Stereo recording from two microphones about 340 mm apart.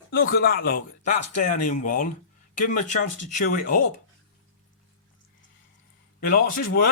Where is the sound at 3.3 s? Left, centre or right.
Left.